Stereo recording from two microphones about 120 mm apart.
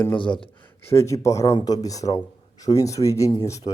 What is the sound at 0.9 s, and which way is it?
Speech, 25° left (ahead or behind).